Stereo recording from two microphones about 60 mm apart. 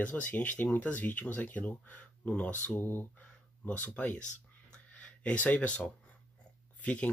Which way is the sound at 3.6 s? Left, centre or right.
Left.